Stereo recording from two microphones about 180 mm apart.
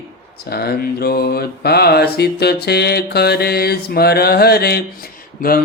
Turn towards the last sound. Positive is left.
turn(degrees=55)  # may be behind; listen again after turning